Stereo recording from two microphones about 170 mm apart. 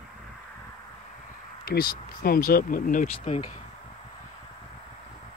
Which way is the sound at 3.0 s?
35° left (ahead or behind).